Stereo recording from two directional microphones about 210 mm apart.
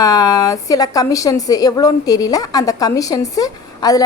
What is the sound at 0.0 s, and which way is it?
A woman's voice, 15° left (ahead or behind).